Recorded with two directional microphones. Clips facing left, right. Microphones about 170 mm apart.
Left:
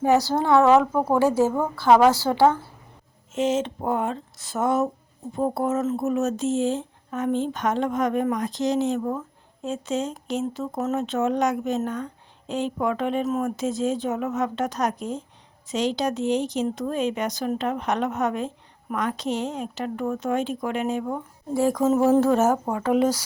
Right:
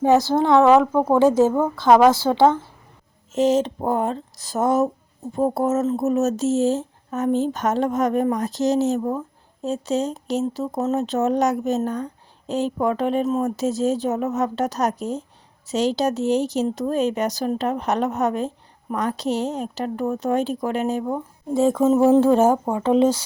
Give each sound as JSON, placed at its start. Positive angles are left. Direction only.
{"t": 0.0, "sound": "a woman's voice", "side_deg": -15}
{"t": 3.3, "sound": "speech", "side_deg": -40}
{"t": 16.0, "sound": "speech", "side_deg": -40}
{"t": 21.0, "sound": "a sound", "side_deg": -25}